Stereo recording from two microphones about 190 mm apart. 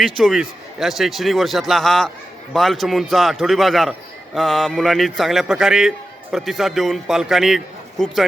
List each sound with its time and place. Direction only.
0.2 s a man's voice: centre (ahead or behind)